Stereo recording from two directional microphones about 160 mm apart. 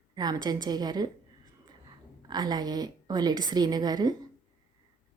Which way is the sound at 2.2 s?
25° right (ahead or behind).